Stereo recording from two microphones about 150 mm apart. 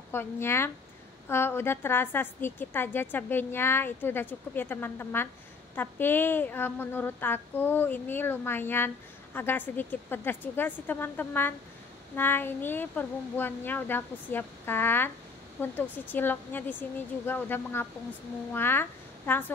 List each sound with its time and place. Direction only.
0.1 s speech: 15° left (ahead or behind)